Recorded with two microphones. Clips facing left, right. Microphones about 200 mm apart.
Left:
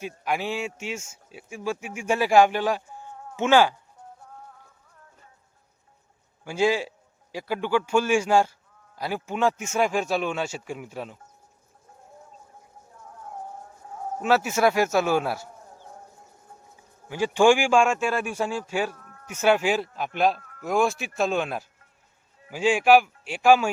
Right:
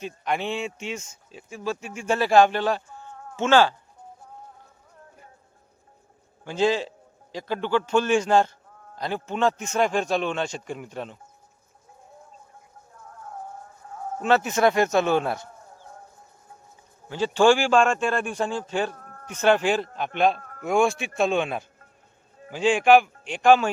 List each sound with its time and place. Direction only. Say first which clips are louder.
0.0 s speech: right 1 dB; 5° left (ahead or behind)
6.4 s speech: even; 10° left (ahead or behind)
13.1 s music: even; 10° left (ahead or behind)
14.2 s speech: right 1 dB; 5° left (ahead or behind)
17.1 s speech: even; 10° left (ahead or behind)
18.9 s a sound: right 4 dB; 45° right (ahead or behind)
19.3 s speech: right 1 dB; 10° left (ahead or behind)
20.4 s a sound: right 4 dB; 50° right (ahead or behind)
20.7 s speech: right 2 dB; centre (ahead or behind)